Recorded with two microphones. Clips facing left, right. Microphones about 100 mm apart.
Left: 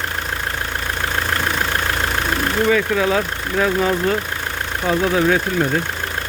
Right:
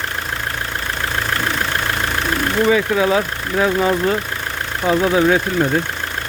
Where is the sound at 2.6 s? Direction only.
5° right (ahead or behind).